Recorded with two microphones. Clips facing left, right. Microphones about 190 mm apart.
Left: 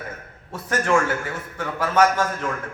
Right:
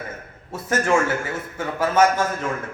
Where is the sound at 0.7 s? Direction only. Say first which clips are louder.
Right 1 dB; 25° right (ahead or behind).